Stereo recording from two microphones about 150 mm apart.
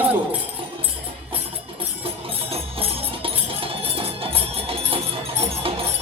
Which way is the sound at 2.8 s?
40° right (ahead or behind).